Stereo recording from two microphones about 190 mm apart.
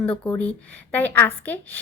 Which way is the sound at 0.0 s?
5° left (ahead or behind).